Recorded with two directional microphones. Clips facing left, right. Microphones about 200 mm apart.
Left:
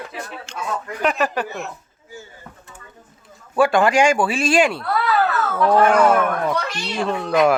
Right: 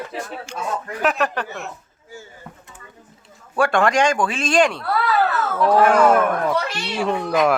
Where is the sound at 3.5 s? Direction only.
Centre (ahead or behind).